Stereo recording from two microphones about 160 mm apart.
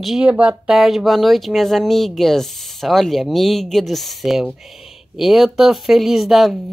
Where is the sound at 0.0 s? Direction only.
5° right (ahead or behind).